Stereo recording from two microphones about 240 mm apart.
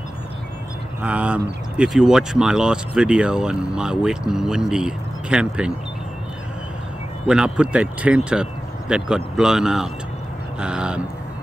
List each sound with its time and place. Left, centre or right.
1.0 s speech: centre
7.2 s speech: centre